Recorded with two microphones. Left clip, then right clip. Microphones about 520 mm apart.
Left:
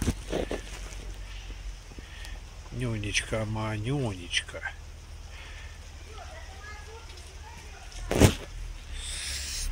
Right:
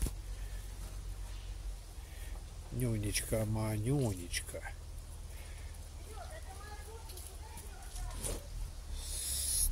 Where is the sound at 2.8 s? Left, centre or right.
Right.